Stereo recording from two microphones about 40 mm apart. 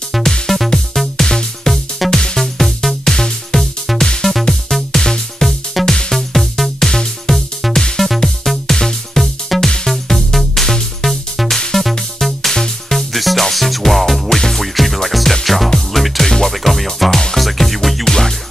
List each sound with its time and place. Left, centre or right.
0.2 s music: centre
2.4 s music: centre
3.2 s music: centre
3.8 s music: centre
16.3 s music: centre
16.5 s music: centre